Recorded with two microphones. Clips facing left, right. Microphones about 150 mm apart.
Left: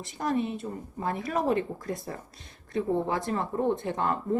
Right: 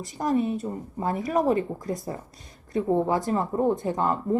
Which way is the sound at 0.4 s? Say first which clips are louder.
Right 5 dB; 40° right (ahead or behind).